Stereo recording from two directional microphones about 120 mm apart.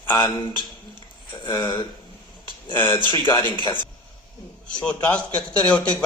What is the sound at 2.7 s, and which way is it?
Speech, 15° left (ahead or behind).